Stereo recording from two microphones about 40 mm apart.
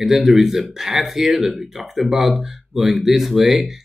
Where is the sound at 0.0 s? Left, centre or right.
Centre.